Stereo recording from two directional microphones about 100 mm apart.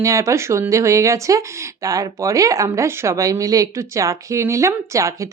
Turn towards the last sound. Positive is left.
turn(degrees=-30)  # may be behind; listen again after turning